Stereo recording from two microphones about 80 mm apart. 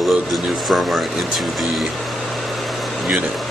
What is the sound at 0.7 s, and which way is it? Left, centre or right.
Speech, centre.